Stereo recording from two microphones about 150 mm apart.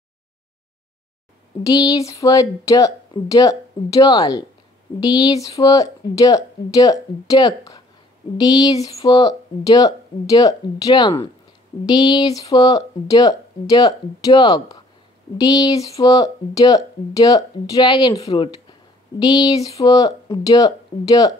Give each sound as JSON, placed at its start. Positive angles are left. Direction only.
{"t": 1.6, "sound": "speech", "side_deg": 25}